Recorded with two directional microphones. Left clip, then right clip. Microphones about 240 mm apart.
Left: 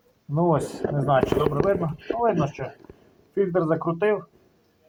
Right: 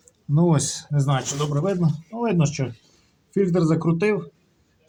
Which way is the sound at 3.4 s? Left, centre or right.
Right.